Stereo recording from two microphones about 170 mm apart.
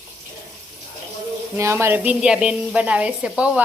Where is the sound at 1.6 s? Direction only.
15° right (ahead or behind).